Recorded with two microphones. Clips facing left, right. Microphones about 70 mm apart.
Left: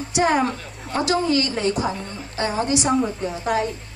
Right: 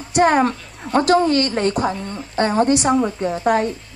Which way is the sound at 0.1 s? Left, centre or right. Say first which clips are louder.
Right 5 dB; right.